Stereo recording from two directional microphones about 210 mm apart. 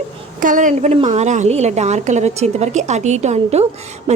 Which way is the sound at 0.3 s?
40° right (ahead or behind).